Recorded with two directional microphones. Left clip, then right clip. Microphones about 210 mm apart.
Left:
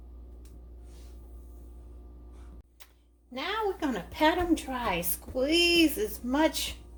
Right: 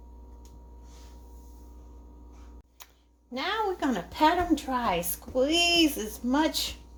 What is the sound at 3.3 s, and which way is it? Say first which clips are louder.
A woman's voice: right 2 dB; 35° right (ahead or behind).